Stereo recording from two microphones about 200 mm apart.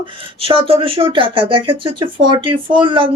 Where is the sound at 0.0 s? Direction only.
25° right (ahead or behind).